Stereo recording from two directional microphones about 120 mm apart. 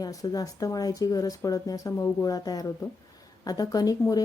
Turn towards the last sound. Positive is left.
turn(degrees=30)  # may be behind; listen again after turning